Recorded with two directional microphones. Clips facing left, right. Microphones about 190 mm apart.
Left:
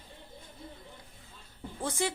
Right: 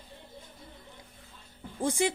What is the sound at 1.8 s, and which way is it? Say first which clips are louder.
Speech: right 5 dB; 15° right (ahead or behind).